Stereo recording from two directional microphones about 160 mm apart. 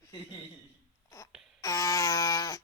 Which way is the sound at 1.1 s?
20° left (ahead or behind).